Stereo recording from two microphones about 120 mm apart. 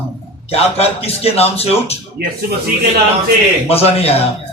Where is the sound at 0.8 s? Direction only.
55° left (ahead or behind).